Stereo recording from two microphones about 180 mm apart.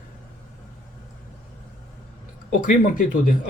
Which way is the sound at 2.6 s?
50° left (ahead or behind).